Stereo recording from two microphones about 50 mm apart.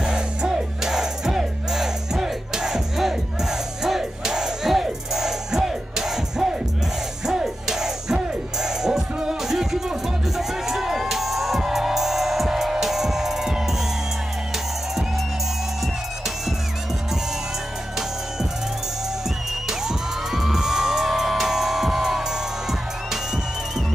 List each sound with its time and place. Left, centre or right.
0.0 s music: centre
19.2 s music: centre